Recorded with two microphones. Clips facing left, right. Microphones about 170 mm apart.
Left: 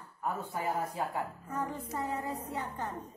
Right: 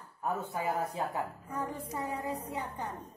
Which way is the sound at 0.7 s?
20° right (ahead or behind).